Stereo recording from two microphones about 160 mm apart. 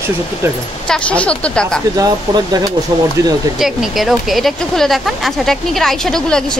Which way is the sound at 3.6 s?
Centre (ahead or behind).